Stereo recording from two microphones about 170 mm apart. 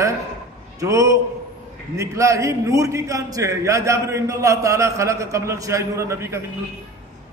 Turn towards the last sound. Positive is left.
turn(degrees=-15)  # may be behind; listen again after turning